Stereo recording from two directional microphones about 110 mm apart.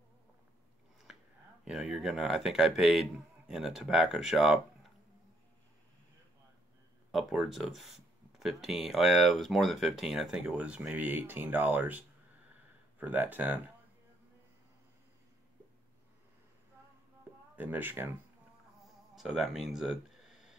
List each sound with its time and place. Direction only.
1.6 s speech: 5° right (ahead or behind)
7.1 s speech: centre (ahead or behind); by 12.0 s 15° right (ahead or behind)
13.0 s speech: 15° right (ahead or behind)
17.6 s speech: 15° right (ahead or behind)
18.8 s a sound: centre (ahead or behind)